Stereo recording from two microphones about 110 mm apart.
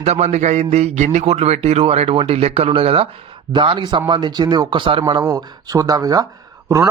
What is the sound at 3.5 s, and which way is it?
A man's voice, 50° right (ahead or behind).